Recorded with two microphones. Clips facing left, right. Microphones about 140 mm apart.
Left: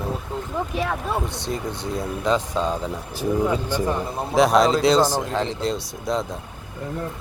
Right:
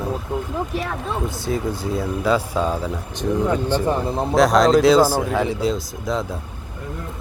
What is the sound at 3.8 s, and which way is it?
Speech, 25° right (ahead or behind).